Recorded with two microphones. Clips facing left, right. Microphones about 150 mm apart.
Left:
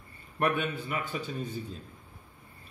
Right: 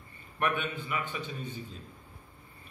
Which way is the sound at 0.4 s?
40° left (ahead or behind).